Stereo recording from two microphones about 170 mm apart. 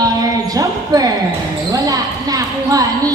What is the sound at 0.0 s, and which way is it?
Basketball bounce, 20° right (ahead or behind).